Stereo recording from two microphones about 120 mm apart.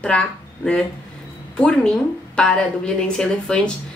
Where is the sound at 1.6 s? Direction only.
5° left (ahead or behind).